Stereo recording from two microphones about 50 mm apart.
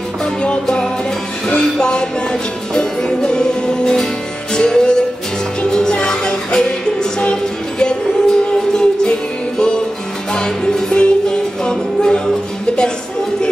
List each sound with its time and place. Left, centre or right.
0.2 s music: centre
10.3 s music: centre